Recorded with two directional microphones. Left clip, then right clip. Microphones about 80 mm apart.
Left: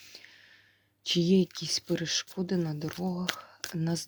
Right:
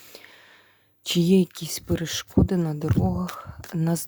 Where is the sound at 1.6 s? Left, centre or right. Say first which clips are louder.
Right 2 dB; right.